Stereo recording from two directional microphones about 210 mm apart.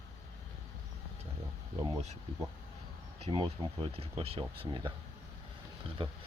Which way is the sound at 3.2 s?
25° right (ahead or behind).